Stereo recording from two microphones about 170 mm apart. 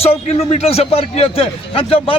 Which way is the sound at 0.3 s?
35° left (ahead or behind).